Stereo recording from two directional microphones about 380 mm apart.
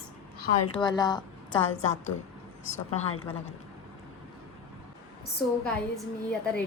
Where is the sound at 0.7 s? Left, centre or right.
Centre.